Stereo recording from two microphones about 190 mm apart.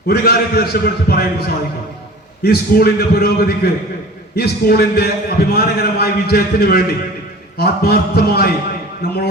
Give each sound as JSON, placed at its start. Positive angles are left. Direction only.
{"t": 0.1, "sound": "a man's voice", "side_deg": 55}